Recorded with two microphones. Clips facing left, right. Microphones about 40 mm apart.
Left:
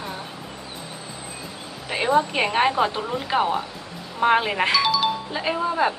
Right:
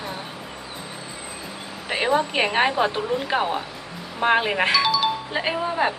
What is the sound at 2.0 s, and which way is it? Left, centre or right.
A woman's voice, centre.